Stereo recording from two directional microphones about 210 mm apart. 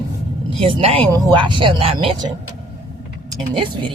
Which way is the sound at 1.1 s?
15° right (ahead or behind).